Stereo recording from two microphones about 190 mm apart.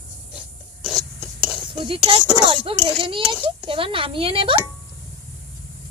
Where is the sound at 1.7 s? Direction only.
25° right (ahead or behind).